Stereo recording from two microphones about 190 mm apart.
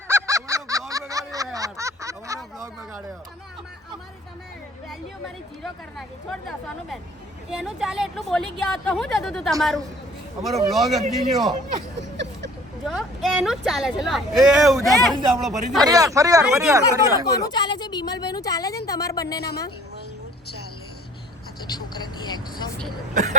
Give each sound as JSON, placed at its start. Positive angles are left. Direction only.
{"t": 0.1, "sound": "fowl", "side_deg": -15}
{"t": 1.5, "sound": "a sound", "side_deg": -15}
{"t": 5.6, "sound": "a woman's voice", "side_deg": 0}
{"t": 11.9, "sound": "a sound", "side_deg": -70}
{"t": 12.9, "sound": "a woman's voice", "side_deg": 0}
{"t": 15.8, "sound": "speech", "side_deg": -20}
{"t": 16.5, "sound": "a woman's voice", "side_deg": -5}
{"t": 16.7, "sound": "speech", "side_deg": -15}
{"t": 17.5, "sound": "a sound", "side_deg": 20}
{"t": 21.8, "sound": "vehicle", "side_deg": 20}